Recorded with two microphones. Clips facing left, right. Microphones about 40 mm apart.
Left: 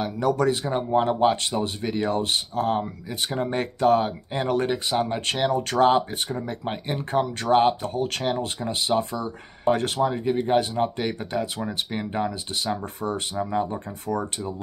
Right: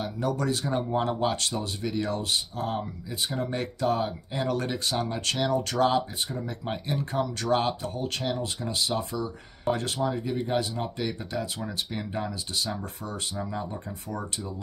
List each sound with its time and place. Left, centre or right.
0.0 s speech: left
0.5 s speech: left
4.8 s speech: left
5.1 s speech: left